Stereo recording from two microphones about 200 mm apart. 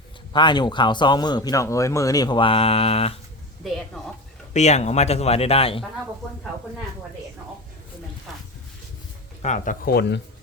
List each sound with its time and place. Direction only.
0.3 s speech: 20° left (ahead or behind)
3.6 s a woman's voice: centre (ahead or behind)
4.5 s speech: 35° left (ahead or behind)
8.3 s a sound: centre (ahead or behind)
9.4 s speech: 40° left (ahead or behind); by 10.2 s 55° left (ahead or behind)